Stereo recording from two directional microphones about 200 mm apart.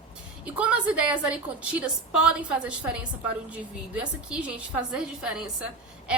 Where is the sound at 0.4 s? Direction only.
5° right (ahead or behind).